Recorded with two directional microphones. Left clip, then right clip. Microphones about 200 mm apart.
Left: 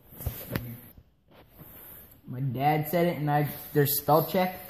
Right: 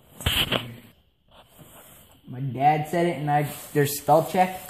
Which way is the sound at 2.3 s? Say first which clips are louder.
Right 5 dB; 10° right (ahead or behind).